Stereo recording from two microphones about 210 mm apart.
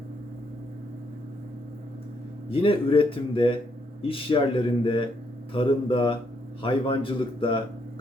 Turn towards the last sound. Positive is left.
turn(degrees=25)  # may be behind; listen again after turning